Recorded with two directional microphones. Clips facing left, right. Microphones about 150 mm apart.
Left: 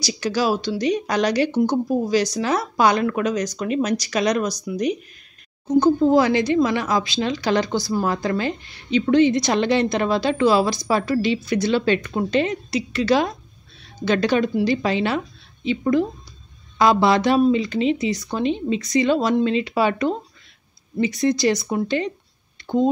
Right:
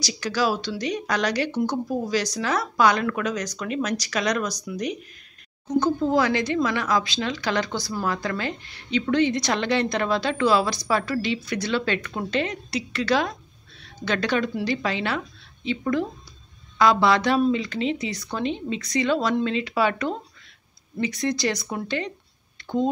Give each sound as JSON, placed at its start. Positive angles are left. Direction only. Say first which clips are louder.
{"t": 0.0, "sound": "a woman's voice", "louder": "left 3 dB", "side_deg": 25}